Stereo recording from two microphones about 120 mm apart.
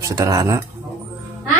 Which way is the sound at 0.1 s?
30° right (ahead or behind).